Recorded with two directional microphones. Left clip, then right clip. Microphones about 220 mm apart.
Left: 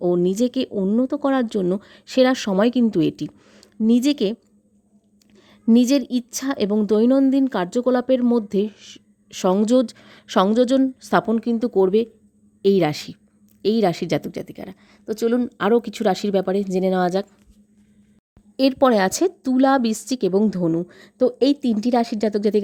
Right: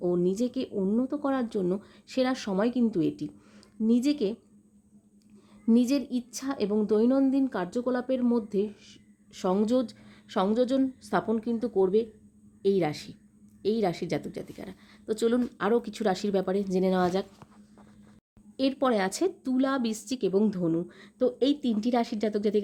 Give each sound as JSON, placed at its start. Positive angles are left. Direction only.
{"t": 0.0, "sound": "a woman's voice", "side_deg": 40}
{"t": 5.6, "sound": "a woman's voice", "side_deg": 40}
{"t": 18.5, "sound": "a woman's voice", "side_deg": 40}